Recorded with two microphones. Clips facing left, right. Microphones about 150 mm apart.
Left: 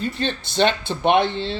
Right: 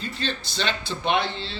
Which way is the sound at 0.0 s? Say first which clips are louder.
Left 6 dB; 55° left (ahead or behind).